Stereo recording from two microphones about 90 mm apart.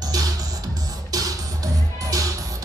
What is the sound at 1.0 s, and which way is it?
Music, 40° right (ahead or behind).